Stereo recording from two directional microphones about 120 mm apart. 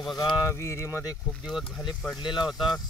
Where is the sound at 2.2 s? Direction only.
40° left (ahead or behind).